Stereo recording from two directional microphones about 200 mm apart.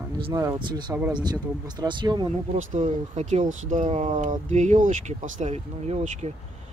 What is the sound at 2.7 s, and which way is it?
Speech, 35° right (ahead or behind).